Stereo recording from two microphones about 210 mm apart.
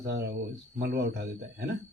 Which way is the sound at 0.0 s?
50° right (ahead or behind).